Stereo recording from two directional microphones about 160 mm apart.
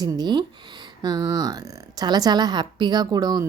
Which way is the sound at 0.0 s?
25° right (ahead or behind).